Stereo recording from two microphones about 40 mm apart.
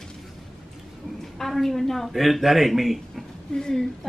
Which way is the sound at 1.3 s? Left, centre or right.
Centre.